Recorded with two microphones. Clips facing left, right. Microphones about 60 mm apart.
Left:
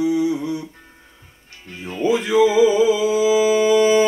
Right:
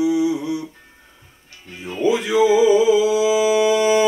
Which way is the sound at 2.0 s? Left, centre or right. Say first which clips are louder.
Even; left.